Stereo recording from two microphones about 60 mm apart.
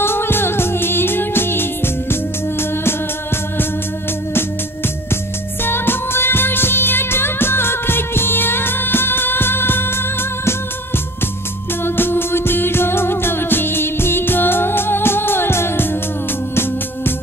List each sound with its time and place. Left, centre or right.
0.0 s music: left
5.1 s music: left
11.8 s music: left